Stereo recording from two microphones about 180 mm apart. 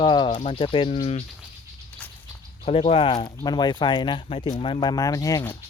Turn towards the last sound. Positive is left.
turn(degrees=15)  # may be behind; listen again after turning